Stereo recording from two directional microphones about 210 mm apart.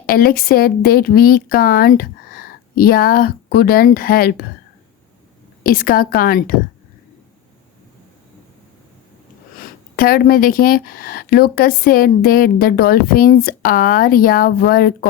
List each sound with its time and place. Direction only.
0.0 s speech: 45° left (ahead or behind)
5.6 s speech: 45° left (ahead or behind)
9.6 s speech: 45° left (ahead or behind)